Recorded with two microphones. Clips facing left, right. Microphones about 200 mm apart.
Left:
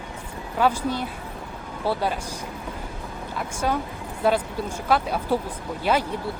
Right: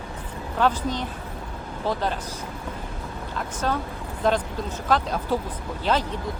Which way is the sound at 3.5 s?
10° left (ahead or behind).